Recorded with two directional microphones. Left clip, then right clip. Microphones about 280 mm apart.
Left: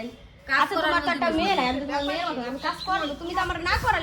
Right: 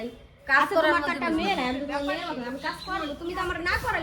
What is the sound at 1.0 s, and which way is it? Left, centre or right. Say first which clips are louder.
A woman's voice: left 3 dB; centre.